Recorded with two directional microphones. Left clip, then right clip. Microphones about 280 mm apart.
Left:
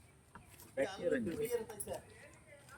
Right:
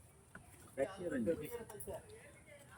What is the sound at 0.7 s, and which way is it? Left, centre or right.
Speech, centre.